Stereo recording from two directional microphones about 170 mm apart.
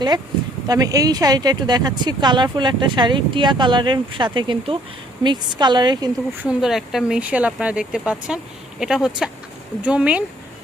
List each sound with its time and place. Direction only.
0.7 s speech: 20° right (ahead or behind)
6.3 s speech: 10° right (ahead or behind)